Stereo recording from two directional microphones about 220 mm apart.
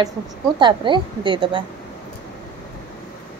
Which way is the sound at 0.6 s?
20° right (ahead or behind).